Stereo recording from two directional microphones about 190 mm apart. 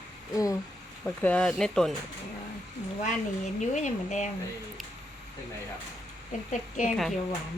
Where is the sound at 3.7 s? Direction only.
40° left (ahead or behind).